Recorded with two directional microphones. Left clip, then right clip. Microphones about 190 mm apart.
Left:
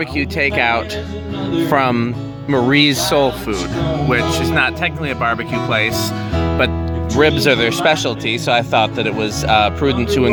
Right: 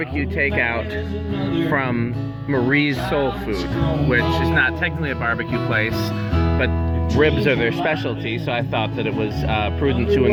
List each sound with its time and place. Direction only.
0.2 s speech: 20° left (ahead or behind)
4.5 s speech: 20° left (ahead or behind)
6.3 s music: 45° right (ahead or behind)
7.2 s speech: 15° left (ahead or behind)